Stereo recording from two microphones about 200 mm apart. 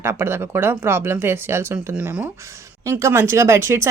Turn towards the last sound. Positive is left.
turn(degrees=-15)  # may be behind; listen again after turning